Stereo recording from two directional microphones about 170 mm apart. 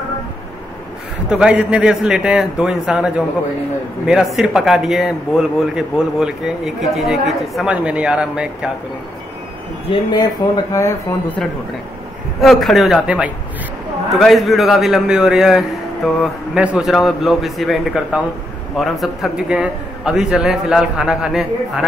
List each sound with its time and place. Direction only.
1.3 s a man's voice: 5° right (ahead or behind)
9.8 s speech: 25° left (ahead or behind)
12.4 s a man's voice: centre (ahead or behind)